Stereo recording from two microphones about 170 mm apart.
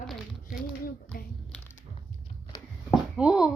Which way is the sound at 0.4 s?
60° left (ahead or behind).